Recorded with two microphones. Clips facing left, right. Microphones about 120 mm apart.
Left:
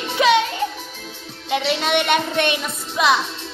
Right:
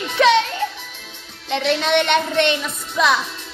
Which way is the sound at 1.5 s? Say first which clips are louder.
Right 1 dB; 10° left (ahead or behind).